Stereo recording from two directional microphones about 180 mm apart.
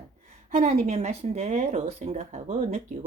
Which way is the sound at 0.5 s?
40° right (ahead or behind).